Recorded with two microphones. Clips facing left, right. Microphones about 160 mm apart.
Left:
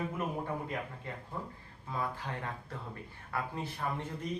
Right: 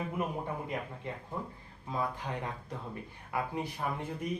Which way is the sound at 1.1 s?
20° right (ahead or behind).